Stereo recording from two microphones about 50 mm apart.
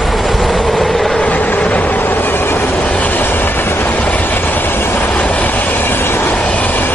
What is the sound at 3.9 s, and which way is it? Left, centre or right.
Train, left.